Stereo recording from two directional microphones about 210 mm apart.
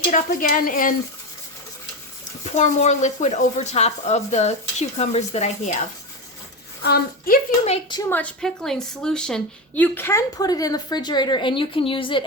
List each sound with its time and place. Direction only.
0.1 s speech: 40° left (ahead or behind)
2.6 s speech: 35° left (ahead or behind)
6.8 s a woman's voice: 50° left (ahead or behind)
7.6 s speech: 25° left (ahead or behind)
8.1 s a woman's voice: 5° left (ahead or behind); by 12.2 s 25° left (ahead or behind)